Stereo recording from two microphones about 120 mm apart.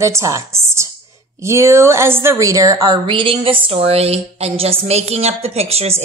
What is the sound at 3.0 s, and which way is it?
A woman's voice, 45° right (ahead or behind).